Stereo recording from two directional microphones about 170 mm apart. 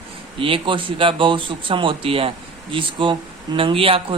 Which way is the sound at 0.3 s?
30° right (ahead or behind).